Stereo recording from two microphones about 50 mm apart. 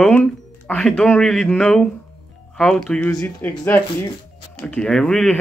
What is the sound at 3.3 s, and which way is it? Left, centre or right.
Speech, left.